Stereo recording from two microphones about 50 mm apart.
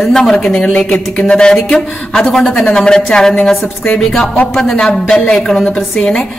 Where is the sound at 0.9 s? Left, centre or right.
Centre.